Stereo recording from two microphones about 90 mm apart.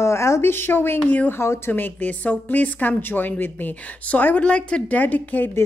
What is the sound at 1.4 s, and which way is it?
Speech, 30° left (ahead or behind).